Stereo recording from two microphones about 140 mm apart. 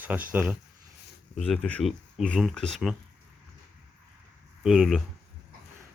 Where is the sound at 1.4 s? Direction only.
Centre (ahead or behind).